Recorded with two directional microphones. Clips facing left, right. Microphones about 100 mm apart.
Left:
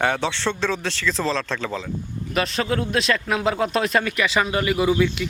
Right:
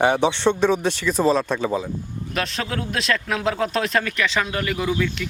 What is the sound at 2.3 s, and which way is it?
A man's voice, centre (ahead or behind).